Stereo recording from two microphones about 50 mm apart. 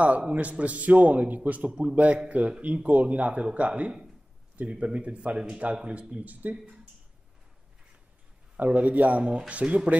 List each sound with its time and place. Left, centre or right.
0.0 s a man's voice: right
6.4 s a man's voice: right
8.5 s a man's voice: right